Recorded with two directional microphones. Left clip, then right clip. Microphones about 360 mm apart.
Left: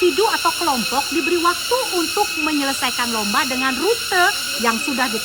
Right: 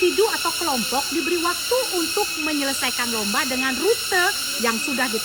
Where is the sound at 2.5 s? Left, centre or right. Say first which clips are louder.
Left 3 dB; centre.